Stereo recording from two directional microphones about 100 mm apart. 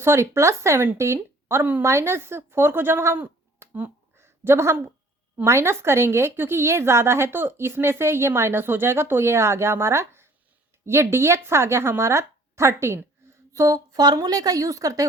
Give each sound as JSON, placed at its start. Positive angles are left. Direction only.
{"t": 0.0, "sound": "a woman's voice", "side_deg": -25}